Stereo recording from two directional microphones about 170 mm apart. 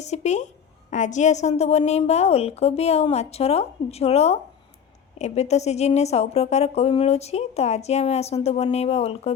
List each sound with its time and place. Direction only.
0.0 s a woman's voice: 40° left (ahead or behind)